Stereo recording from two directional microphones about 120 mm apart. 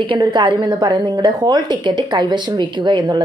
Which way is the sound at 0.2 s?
40° right (ahead or behind).